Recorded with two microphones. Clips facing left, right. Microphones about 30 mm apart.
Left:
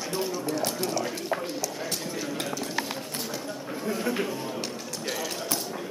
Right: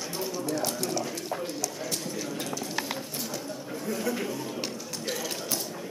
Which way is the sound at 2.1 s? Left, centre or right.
Left.